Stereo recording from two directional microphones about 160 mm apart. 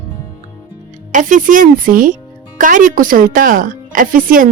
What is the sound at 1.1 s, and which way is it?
A woman's voice, 55° right (ahead or behind).